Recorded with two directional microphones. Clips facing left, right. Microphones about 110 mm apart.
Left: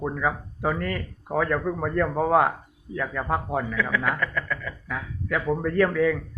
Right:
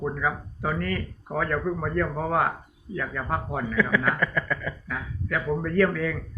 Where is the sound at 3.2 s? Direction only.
15° left (ahead or behind).